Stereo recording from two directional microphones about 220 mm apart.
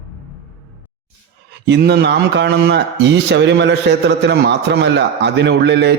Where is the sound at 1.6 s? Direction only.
50° right (ahead or behind).